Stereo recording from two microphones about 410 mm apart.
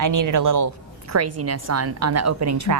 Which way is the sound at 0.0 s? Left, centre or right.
Right.